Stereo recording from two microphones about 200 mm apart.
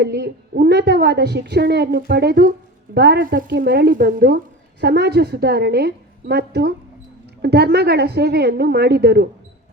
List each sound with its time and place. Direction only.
0.0 s a woman's voice: 55° right (ahead or behind)